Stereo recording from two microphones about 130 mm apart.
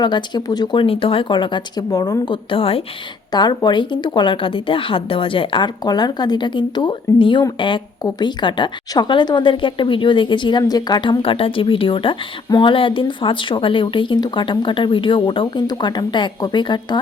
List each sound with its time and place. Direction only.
0.0 s speech: 35° left (ahead or behind)
3.3 s speech: 35° left (ahead or behind)